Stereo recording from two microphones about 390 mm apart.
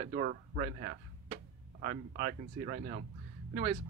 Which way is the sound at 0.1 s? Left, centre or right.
Right.